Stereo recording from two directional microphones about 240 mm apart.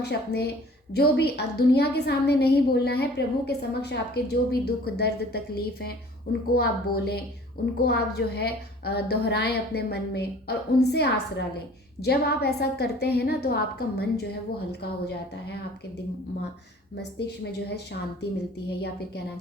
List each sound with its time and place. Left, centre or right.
0.0 s a woman's voice: left
6.5 s a woman's voice: left
17.2 s a woman's voice: left